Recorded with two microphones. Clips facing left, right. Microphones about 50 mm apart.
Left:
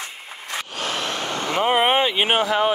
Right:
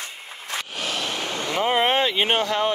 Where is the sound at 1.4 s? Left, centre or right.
Centre.